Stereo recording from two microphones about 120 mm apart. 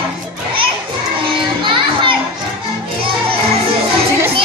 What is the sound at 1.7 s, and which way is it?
Children playing, 45° right (ahead or behind).